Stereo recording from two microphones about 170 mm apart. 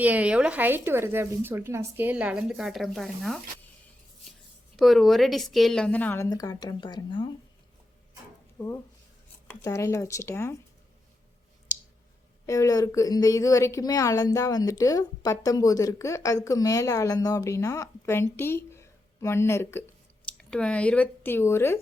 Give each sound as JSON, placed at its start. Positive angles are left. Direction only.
{"t": 0.0, "sound": "speech", "side_deg": -10}
{"t": 4.8, "sound": "a woman's voice", "side_deg": 0}
{"t": 6.2, "sound": "a woman's voice", "side_deg": 20}
{"t": 8.5, "sound": "speech", "side_deg": 15}
{"t": 12.5, "sound": "a woman's voice", "side_deg": 20}